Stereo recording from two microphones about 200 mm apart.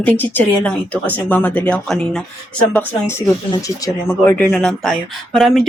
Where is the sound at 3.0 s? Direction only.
15° left (ahead or behind).